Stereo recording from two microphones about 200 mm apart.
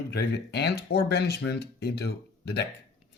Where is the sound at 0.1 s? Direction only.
55° left (ahead or behind).